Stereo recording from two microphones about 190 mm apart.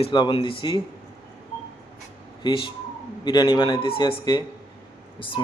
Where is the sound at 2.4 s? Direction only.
25° left (ahead or behind).